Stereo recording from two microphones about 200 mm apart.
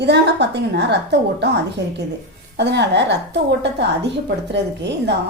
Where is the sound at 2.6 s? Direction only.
60° right (ahead or behind).